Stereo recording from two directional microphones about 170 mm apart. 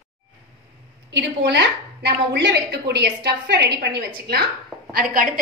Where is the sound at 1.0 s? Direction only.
90° right.